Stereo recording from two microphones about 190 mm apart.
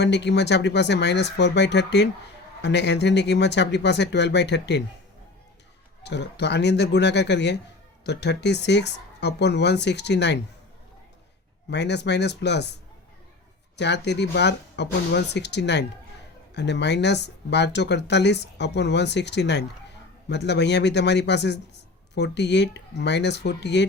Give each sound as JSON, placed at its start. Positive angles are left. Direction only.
{"t": 0.0, "sound": "speech", "side_deg": 65}
{"t": 6.0, "sound": "speech", "side_deg": 65}
{"t": 11.7, "sound": "speech", "side_deg": 65}
{"t": 13.7, "sound": "speech", "side_deg": 65}